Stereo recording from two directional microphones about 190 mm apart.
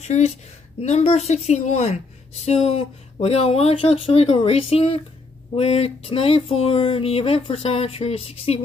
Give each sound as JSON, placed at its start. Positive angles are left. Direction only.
{"t": 0.0, "sound": "a woman's voice", "side_deg": 35}